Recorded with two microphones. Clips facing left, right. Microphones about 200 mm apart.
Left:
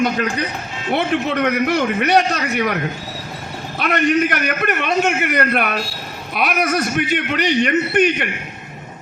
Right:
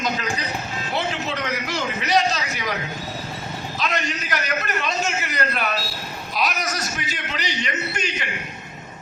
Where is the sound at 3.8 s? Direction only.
60° left (ahead or behind).